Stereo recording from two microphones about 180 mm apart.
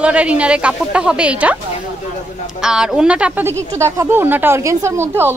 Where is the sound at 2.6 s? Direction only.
5° right (ahead or behind).